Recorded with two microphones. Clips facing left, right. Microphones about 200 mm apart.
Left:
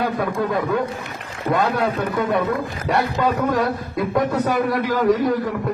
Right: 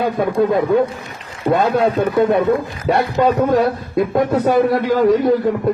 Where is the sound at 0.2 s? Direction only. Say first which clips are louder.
Right 6 dB; 25° right (ahead or behind).